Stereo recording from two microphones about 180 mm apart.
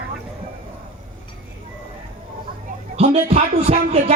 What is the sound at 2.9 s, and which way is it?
Speech, 35° right (ahead or behind).